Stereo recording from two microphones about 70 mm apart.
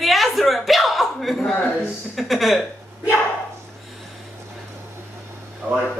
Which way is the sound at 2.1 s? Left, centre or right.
Centre.